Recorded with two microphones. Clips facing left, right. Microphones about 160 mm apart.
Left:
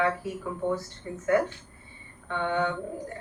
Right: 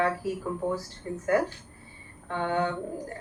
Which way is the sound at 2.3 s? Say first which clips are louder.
Even; 35° right (ahead or behind).